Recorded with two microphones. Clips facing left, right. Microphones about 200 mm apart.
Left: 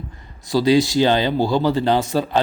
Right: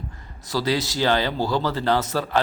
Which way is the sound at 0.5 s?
15° left (ahead or behind).